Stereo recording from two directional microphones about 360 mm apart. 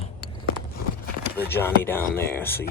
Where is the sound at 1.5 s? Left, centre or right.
Centre.